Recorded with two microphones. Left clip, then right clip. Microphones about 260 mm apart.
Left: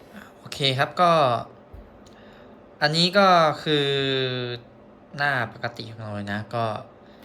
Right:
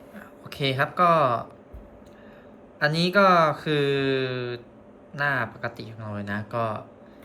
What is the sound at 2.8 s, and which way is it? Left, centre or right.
Speech, centre.